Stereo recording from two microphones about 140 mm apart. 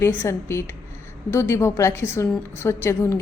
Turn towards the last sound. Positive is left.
turn(degrees=20)  # may be behind; listen again after turning